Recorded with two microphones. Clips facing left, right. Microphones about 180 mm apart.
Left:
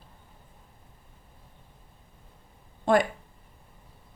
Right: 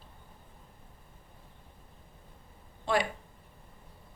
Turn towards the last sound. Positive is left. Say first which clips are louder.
# left 7 dB
turn(degrees=50)  # may be behind; listen again after turning